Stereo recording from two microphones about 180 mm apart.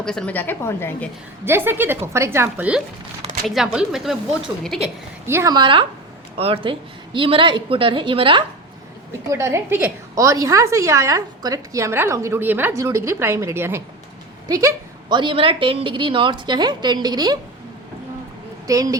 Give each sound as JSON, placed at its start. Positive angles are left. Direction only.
{"t": 0.0, "sound": "a woman's voice", "side_deg": 5}
{"t": 1.5, "sound": "a woman's voice", "side_deg": -10}
{"t": 5.2, "sound": "a woman's voice", "side_deg": -15}
{"t": 9.3, "sound": "a woman's voice", "side_deg": -15}
{"t": 18.7, "sound": "a woman's voice", "side_deg": -20}